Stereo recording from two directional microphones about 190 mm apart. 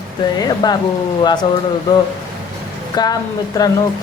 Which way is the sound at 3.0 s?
20° left (ahead or behind).